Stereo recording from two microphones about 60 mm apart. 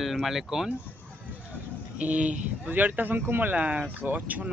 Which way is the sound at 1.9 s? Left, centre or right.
Right.